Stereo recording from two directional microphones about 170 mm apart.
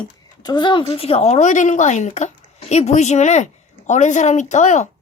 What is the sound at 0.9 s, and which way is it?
Speech, 35° left (ahead or behind).